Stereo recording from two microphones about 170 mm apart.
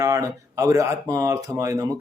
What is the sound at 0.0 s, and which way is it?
A man's voice, 20° right (ahead or behind).